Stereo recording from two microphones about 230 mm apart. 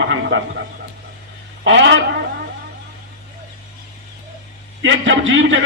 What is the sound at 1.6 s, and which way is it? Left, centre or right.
Speech, right.